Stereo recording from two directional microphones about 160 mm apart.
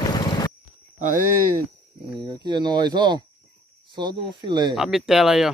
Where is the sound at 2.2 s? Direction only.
30° right (ahead or behind).